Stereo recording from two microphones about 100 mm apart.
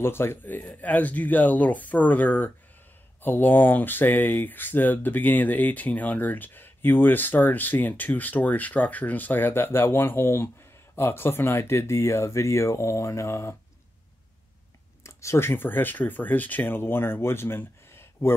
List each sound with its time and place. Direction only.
0.0 s speech: 25° left (ahead or behind)
15.0 s speech: 30° left (ahead or behind)